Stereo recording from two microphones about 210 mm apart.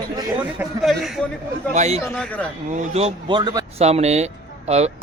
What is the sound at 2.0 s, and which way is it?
Speech, 5° left (ahead or behind).